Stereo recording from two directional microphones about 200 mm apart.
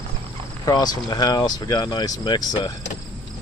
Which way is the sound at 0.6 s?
20° left (ahead or behind).